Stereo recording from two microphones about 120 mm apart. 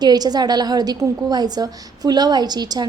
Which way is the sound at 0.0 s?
35° right (ahead or behind).